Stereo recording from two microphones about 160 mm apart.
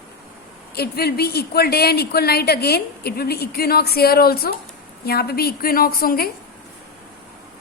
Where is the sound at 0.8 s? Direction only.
75° left (ahead or behind).